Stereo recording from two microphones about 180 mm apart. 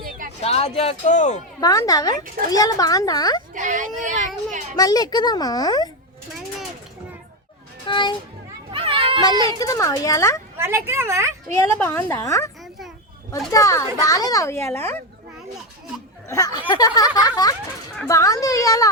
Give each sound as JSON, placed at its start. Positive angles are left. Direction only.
{"t": 0.0, "sound": "a sound", "side_deg": -50}
{"t": 0.4, "sound": "speech", "side_deg": 35}
{"t": 1.6, "sound": "speech", "side_deg": 20}
{"t": 3.5, "sound": "speech", "side_deg": -45}
{"t": 4.8, "sound": "speech", "side_deg": 20}
{"t": 7.9, "sound": "a child's voice", "side_deg": 25}
{"t": 8.7, "sound": "children playing", "side_deg": -30}
{"t": 9.4, "sound": "speech", "side_deg": 20}
{"t": 10.6, "sound": "a woman's voice", "side_deg": -15}
{"t": 11.7, "sound": "a woman's voice", "side_deg": 10}
{"t": 13.5, "sound": "a woman's voice", "side_deg": 20}
{"t": 16.3, "sound": "speech", "side_deg": 20}